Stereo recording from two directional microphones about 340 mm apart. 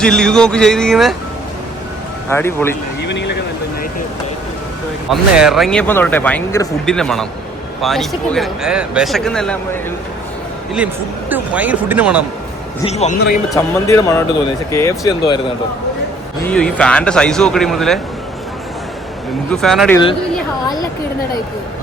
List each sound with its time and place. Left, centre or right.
0.0 s speech: centre
2.3 s speech: centre
3.1 s vehicle: left
5.1 s speech: centre
11.3 s speech: centre
12.8 s a man's voice: centre
13.5 s speech: centre
19.5 s speech: centre